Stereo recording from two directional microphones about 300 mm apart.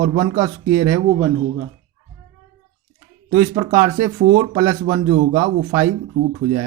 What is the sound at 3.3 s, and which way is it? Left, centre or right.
Speech, centre.